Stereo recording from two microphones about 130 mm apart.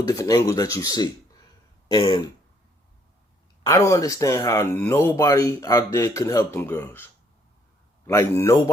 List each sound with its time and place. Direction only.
0.1 s speech: 25° left (ahead or behind)
1.9 s throat clearing: 35° left (ahead or behind)
3.6 s speech: 25° left (ahead or behind)